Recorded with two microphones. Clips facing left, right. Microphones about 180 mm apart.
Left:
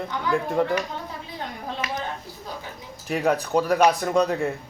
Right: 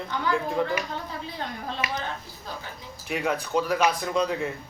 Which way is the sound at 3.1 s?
40° left (ahead or behind).